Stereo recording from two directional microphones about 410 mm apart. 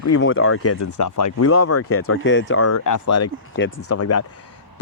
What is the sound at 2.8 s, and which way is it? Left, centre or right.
Speech, left.